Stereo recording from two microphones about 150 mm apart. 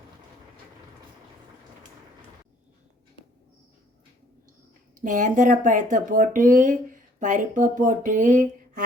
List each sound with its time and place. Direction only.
4.9 s speech: 60° right (ahead or behind)